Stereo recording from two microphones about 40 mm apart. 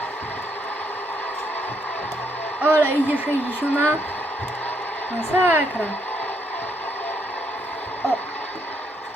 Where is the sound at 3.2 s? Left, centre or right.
Left.